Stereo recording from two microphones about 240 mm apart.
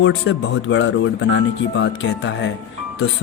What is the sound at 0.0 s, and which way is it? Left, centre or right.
Speech, left.